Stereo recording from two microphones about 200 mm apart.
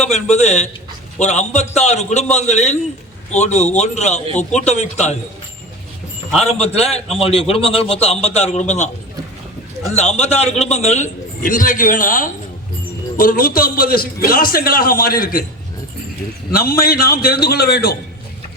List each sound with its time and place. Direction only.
0.1 s a man's voice: 35° left (ahead or behind)
6.4 s a man's voice: 30° left (ahead or behind)
10.0 s a man's voice: 35° left (ahead or behind)
16.5 s a man's voice: 50° left (ahead or behind)